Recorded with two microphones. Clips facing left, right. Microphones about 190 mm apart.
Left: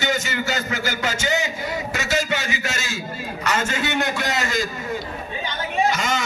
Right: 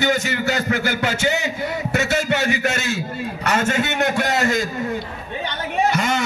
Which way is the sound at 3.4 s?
60° right (ahead or behind).